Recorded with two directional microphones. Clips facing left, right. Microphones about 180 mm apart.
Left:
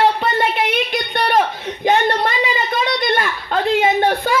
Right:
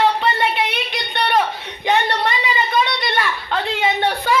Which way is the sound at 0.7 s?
45° left (ahead or behind).